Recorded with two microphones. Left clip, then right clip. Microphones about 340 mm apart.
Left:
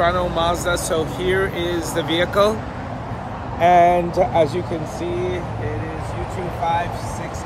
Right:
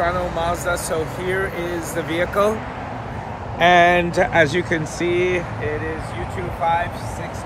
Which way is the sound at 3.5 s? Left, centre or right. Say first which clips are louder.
Even; right.